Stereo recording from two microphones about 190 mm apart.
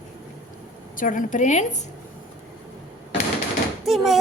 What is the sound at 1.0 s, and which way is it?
Speech, 45° left (ahead or behind).